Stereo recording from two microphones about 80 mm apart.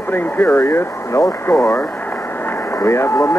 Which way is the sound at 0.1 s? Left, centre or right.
Left.